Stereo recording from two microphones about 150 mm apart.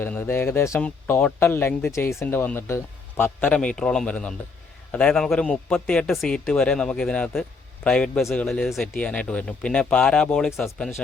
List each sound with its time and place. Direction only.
0.0 s speech: 15° left (ahead or behind)